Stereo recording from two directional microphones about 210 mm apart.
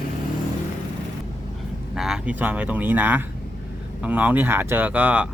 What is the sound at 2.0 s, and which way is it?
Speech, 5° right (ahead or behind).